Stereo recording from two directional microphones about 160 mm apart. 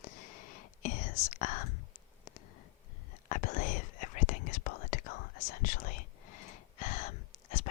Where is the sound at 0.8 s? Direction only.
50° left (ahead or behind).